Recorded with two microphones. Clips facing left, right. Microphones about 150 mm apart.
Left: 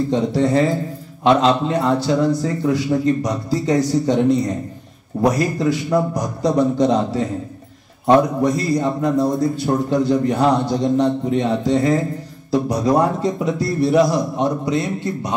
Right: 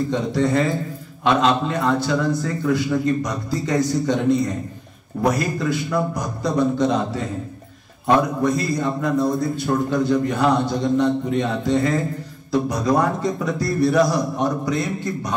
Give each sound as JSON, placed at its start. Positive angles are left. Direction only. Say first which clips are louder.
{"t": 0.1, "sound": "a man's voice", "louder": "left 4 dB", "side_deg": 35}
{"t": 8.5, "sound": "a man's voice", "louder": "left 3 dB", "side_deg": 35}